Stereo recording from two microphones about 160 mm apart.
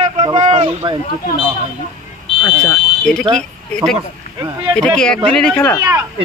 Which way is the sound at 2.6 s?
5° left (ahead or behind).